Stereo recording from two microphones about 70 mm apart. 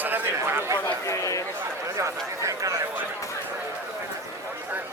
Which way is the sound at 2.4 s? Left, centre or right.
Right.